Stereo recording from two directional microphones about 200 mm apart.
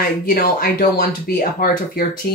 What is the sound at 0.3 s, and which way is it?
Speech, 45° left (ahead or behind).